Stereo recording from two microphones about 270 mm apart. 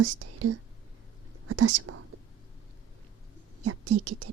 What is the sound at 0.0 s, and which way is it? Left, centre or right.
Speech, right.